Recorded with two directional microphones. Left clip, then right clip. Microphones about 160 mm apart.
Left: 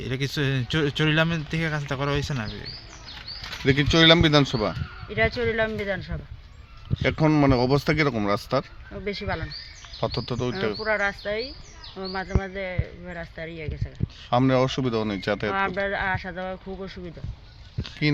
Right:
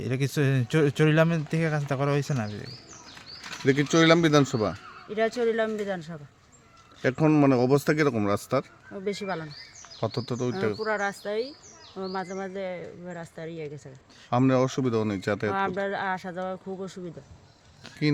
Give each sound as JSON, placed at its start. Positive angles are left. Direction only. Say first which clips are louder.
{"t": 0.0, "sound": "speech", "louder": "even", "side_deg": -55}
{"t": 3.7, "sound": "speech", "louder": "left 3 dB", "side_deg": 0}
{"t": 5.0, "sound": "speech", "louder": "left 1 dB", "side_deg": -20}
{"t": 9.0, "sound": "speech", "louder": "left 1 dB", "side_deg": -25}
{"t": 10.0, "sound": "speech", "louder": "left 2 dB", "side_deg": -5}
{"t": 10.8, "sound": "speech", "louder": "left 4 dB", "side_deg": -20}
{"t": 14.3, "sound": "speech", "louder": "left 2 dB", "side_deg": -5}
{"t": 15.5, "sound": "speech", "louder": "left 3 dB", "side_deg": -25}
{"t": 18.0, "sound": "speech", "louder": "left 1 dB", "side_deg": -5}